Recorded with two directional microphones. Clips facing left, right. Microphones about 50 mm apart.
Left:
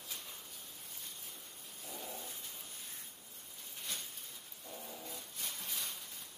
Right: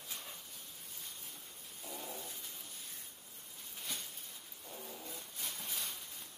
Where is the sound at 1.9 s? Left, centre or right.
Centre.